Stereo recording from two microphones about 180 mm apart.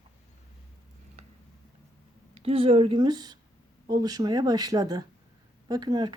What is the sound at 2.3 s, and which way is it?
Speech, 35° right (ahead or behind).